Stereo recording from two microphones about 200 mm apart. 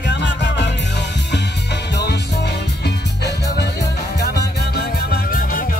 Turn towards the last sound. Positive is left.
turn(degrees=45)  # may be behind; listen again after turning